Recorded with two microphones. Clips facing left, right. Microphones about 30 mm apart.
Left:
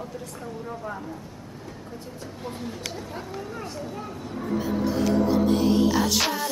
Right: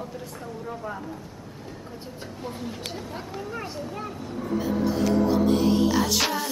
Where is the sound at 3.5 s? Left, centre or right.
Right.